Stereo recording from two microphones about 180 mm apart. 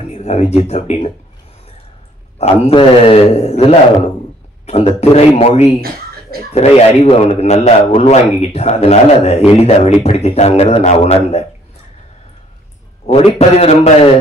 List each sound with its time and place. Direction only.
0.2 s a man's voice: 40° left (ahead or behind)
2.3 s a man's voice: 35° left (ahead or behind)
4.6 s a man's voice: 35° left (ahead or behind)
13.0 s a man's voice: 35° left (ahead or behind)